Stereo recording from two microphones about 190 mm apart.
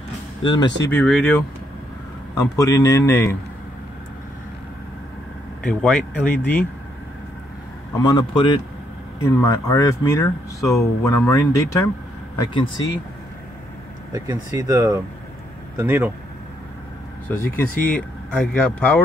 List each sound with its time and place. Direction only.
0.4 s a man's voice: 25° left (ahead or behind)
0.9 s speech: 5° left (ahead or behind)
2.3 s speech: 15° left (ahead or behind)
5.6 s speech: 5° left (ahead or behind)
8.0 s a man's voice: 25° left (ahead or behind)
14.1 s speech: 20° right (ahead or behind)
17.3 s speech: 10° left (ahead or behind)